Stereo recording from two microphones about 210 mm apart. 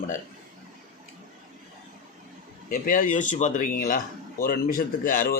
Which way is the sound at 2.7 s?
40° left (ahead or behind).